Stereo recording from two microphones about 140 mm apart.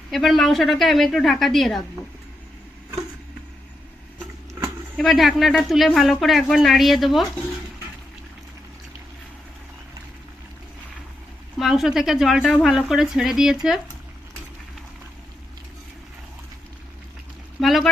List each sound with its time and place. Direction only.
0.1 s speech: centre (ahead or behind)
4.9 s speech: centre (ahead or behind)
11.6 s speech: 5° right (ahead or behind)
17.6 s a sound: centre (ahead or behind)